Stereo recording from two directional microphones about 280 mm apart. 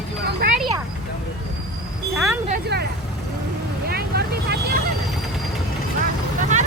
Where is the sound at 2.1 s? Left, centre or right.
Centre.